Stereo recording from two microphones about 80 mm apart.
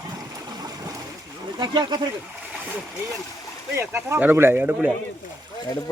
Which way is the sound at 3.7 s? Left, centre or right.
Right.